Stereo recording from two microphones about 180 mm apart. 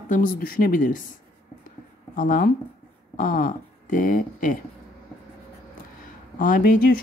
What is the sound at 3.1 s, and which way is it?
Speech, 50° left (ahead or behind).